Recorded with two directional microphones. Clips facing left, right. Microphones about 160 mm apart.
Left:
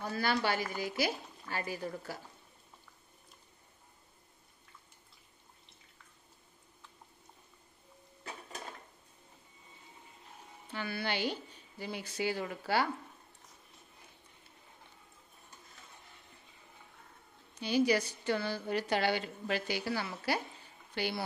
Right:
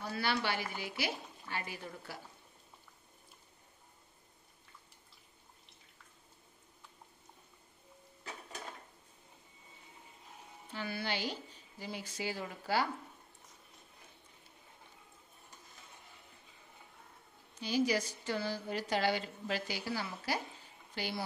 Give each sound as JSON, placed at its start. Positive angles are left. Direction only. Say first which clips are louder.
{"t": 0.1, "sound": "a woman's voice", "louder": "left 3 dB", "side_deg": 45}
{"t": 10.7, "sound": "a woman's voice", "louder": "left 2 dB", "side_deg": 65}
{"t": 17.6, "sound": "a woman's voice", "louder": "left 3 dB", "side_deg": 65}